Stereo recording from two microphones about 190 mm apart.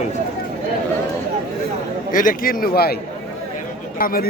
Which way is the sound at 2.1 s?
45° left (ahead or behind).